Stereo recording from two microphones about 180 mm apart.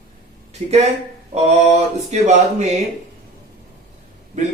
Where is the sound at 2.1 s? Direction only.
40° right (ahead or behind).